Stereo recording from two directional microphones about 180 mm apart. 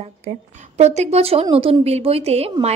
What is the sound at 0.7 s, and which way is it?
A woman's voice, 40° right (ahead or behind).